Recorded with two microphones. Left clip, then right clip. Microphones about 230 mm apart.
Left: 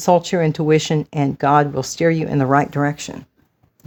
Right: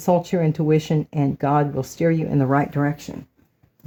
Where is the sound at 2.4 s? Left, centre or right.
Left.